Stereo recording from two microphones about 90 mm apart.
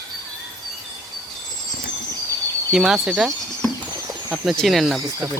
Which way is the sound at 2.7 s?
5° right (ahead or behind).